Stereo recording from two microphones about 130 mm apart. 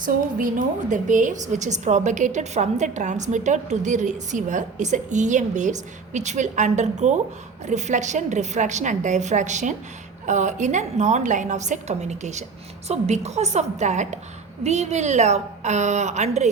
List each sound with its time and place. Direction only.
0.0 s a woman's voice: 90° right; by 16.5 s 60° right (ahead or behind)